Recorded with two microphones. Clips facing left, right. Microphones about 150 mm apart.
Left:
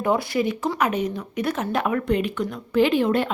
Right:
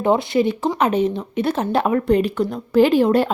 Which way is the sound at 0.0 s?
25° right (ahead or behind).